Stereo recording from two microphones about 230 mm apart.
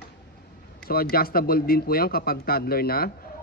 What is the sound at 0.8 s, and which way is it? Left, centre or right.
Speech, left.